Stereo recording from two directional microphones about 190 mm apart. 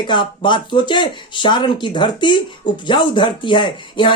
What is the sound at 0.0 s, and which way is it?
Speech, 25° left (ahead or behind).